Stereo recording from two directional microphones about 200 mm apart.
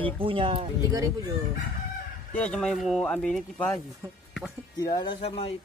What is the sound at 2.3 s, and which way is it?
Speech, 5° left (ahead or behind).